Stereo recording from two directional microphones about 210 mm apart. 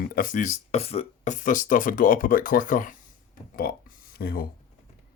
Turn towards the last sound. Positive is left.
turn(degrees=45)  # may be behind; listen again after turning